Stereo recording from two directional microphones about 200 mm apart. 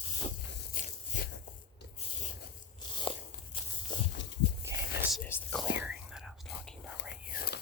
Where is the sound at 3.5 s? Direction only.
25° left (ahead or behind).